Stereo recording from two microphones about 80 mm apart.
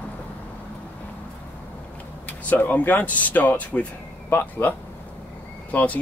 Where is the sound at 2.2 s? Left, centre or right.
Left.